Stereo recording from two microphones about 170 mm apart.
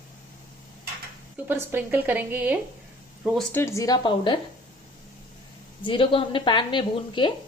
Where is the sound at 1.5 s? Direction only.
10° right (ahead or behind).